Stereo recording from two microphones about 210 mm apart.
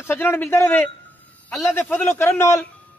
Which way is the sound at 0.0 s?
10° left (ahead or behind).